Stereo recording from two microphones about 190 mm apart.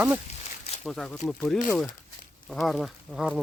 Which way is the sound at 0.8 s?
5° left (ahead or behind).